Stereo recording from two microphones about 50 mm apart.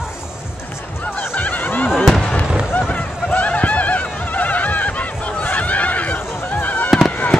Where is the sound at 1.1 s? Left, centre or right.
Left.